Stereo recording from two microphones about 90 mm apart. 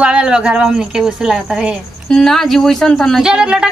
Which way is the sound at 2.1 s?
5° left (ahead or behind).